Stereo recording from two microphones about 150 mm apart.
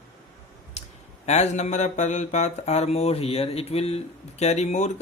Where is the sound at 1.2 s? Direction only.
50° left (ahead or behind).